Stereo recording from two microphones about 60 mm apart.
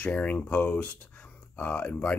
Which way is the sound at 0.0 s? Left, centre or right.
Left.